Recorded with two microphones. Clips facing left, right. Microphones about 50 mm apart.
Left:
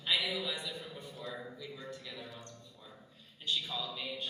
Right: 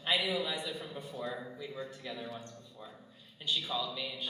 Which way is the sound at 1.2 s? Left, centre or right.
Right.